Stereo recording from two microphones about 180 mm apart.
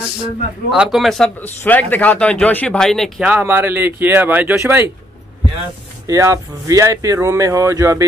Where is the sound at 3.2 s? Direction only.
10° right (ahead or behind).